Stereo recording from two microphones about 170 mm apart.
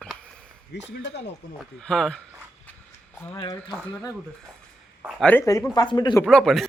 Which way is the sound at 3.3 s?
30° left (ahead or behind).